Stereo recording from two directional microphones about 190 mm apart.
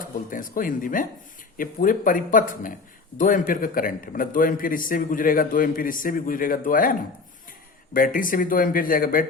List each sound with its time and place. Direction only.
0.0 s a man's voice: 45° left (ahead or behind)
7.9 s a man's voice: 45° left (ahead or behind)